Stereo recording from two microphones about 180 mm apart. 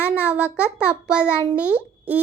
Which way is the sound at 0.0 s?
10° right (ahead or behind).